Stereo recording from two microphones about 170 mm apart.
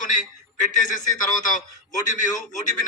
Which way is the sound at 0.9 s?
50° left (ahead or behind).